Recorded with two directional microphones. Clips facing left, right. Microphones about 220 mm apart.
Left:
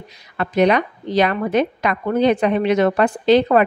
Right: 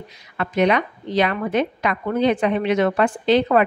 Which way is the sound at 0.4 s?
35° left (ahead or behind).